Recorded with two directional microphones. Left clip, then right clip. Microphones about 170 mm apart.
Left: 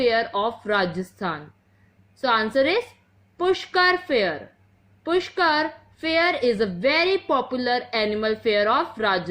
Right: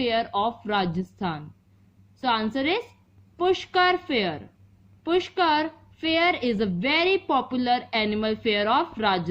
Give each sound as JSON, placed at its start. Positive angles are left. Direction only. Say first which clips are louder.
{"t": 0.3, "sound": "a woman's voice", "louder": "left 2 dB", "side_deg": -20}